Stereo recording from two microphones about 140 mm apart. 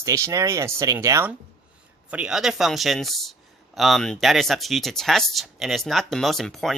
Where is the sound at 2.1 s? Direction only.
5° right (ahead or behind).